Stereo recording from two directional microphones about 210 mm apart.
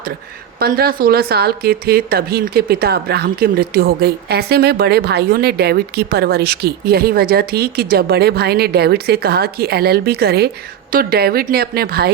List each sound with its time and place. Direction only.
0.6 s speech: 45° right (ahead or behind)